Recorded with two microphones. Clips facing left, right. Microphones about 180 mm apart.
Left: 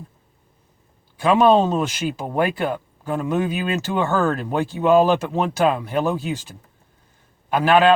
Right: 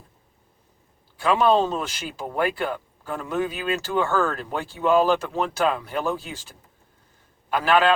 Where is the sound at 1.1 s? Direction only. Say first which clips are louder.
Left 4 dB; 20° left (ahead or behind).